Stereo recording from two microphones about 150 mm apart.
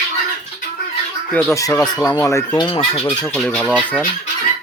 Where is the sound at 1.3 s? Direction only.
20° left (ahead or behind).